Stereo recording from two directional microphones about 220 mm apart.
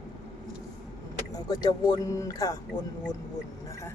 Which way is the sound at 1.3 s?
20° left (ahead or behind).